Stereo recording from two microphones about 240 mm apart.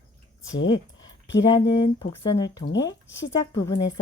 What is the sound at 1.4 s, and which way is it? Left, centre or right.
A woman's voice, centre.